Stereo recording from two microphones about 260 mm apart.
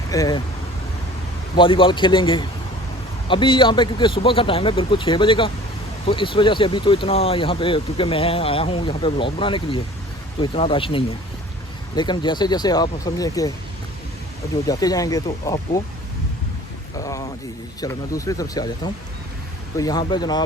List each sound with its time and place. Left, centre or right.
0.1 s speech: centre
1.5 s speech: centre
14.5 s speech: centre
17.0 s speech: centre